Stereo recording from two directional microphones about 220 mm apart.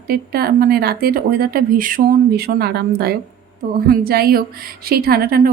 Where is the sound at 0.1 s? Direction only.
45° right (ahead or behind).